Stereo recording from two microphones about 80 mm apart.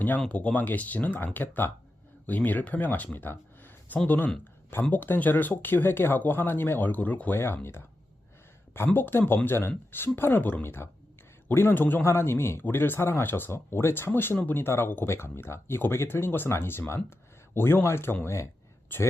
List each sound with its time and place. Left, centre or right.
0.2 s speech: centre